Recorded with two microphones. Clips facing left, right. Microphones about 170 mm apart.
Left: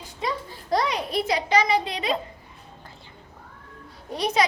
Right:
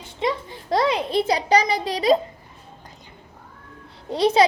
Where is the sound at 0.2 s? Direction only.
25° right (ahead or behind).